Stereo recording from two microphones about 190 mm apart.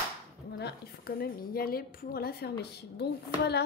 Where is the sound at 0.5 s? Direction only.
60° left (ahead or behind).